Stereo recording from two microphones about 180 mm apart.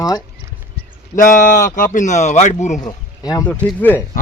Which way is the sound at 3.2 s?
20° left (ahead or behind).